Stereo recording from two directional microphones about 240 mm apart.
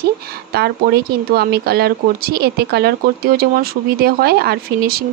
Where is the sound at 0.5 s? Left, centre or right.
Right.